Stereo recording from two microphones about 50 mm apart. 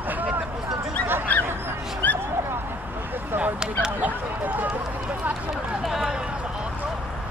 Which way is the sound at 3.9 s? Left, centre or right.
Right.